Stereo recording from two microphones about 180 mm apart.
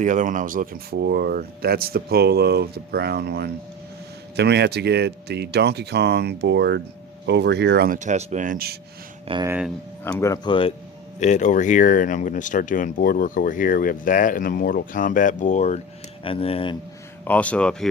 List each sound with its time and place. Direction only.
0.0 s speech: 45° right (ahead or behind); by 7.9 s 65° right (ahead or behind)
7.9 s speech: 40° right (ahead or behind); by 8.8 s 55° right (ahead or behind)
9.2 s speech: 25° right (ahead or behind)
9.5 s speech: 5° right (ahead or behind)
10.0 s speech: 15° left (ahead or behind)
11.2 s speech: 40° left (ahead or behind)
17.2 s speech: 10° left (ahead or behind)